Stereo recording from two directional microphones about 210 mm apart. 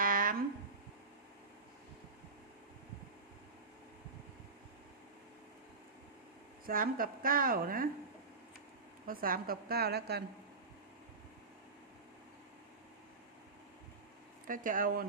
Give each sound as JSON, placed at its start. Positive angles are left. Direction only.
{"t": 0.0, "sound": "a sound", "side_deg": -40}
{"t": 6.7, "sound": "a woman's voice", "side_deg": -45}
{"t": 9.0, "sound": "a woman's voice", "side_deg": -40}
{"t": 14.4, "sound": "speech", "side_deg": -40}